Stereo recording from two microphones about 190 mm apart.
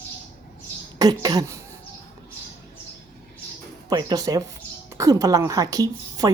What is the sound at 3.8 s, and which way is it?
A woman's voice, 20° right (ahead or behind).